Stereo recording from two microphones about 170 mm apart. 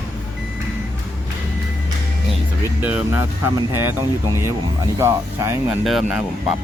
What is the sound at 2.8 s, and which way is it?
Speech, 10° right (ahead or behind).